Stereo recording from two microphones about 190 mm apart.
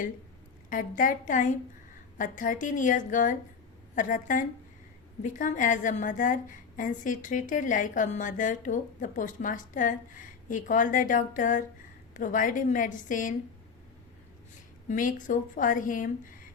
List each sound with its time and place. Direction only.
0.7 s a woman's voice: 45° left (ahead or behind)
14.8 s a woman's voice: 45° left (ahead or behind)